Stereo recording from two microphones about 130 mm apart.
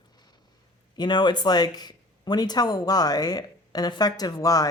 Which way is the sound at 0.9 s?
35° left (ahead or behind).